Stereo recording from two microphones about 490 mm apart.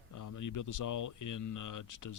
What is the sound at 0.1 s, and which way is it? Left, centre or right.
Speech, left.